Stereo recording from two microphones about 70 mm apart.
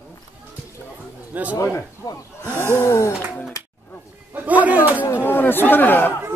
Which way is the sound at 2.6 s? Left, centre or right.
Left.